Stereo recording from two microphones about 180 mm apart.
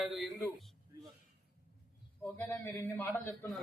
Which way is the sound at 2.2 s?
10° left (ahead or behind).